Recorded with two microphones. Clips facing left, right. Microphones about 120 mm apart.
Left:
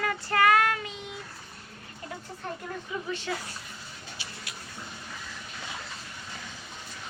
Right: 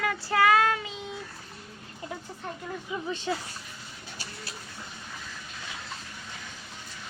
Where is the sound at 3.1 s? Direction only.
20° right (ahead or behind).